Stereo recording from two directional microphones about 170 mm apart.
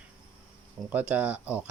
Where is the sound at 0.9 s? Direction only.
10° right (ahead or behind).